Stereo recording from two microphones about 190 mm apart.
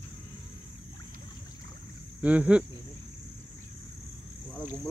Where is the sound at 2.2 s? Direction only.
5° right (ahead or behind).